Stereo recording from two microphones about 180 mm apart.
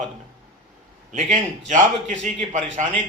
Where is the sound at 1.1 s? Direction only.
40° right (ahead or behind).